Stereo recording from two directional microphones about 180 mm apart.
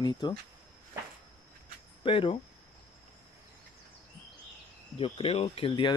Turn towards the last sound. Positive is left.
turn(degrees=25)  # may be behind; listen again after turning